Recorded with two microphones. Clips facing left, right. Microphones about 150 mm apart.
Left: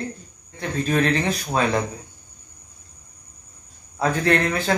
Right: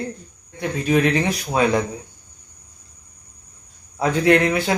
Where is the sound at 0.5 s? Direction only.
10° right (ahead or behind).